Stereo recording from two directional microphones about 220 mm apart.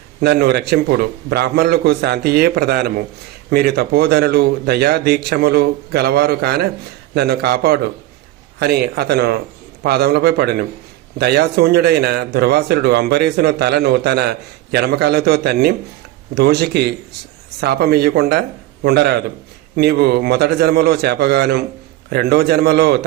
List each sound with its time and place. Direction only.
0.2 s a man's voice: 50° right (ahead or behind)